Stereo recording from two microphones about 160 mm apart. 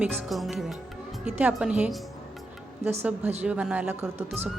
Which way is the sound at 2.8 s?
40° right (ahead or behind).